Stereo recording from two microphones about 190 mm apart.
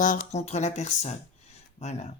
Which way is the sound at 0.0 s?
40° left (ahead or behind).